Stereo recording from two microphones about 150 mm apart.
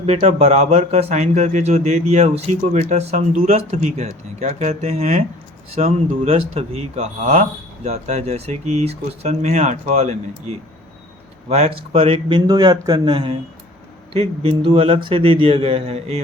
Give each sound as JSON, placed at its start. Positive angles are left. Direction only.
{"t": 0.0, "sound": "a man's voice", "side_deg": -40}
{"t": 12.5, "sound": "a man's voice", "side_deg": -25}